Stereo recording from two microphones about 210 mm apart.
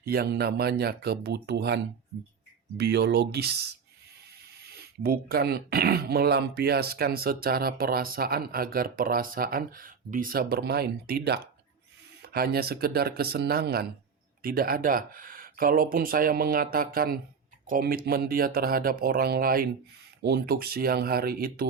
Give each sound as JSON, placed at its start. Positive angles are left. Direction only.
{"t": 0.0, "sound": "speech", "side_deg": -45}